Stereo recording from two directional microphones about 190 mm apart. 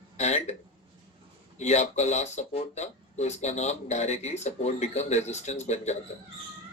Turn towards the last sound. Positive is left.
turn(degrees=35)  # may be behind; listen again after turning